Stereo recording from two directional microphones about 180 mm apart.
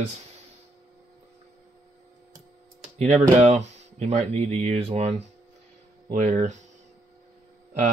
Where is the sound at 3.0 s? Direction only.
40° right (ahead or behind).